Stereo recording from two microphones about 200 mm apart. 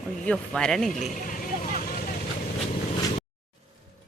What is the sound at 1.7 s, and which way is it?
Vehicle, 40° left (ahead or behind).